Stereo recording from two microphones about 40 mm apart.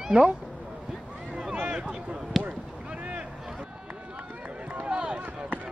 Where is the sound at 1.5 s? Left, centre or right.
Right.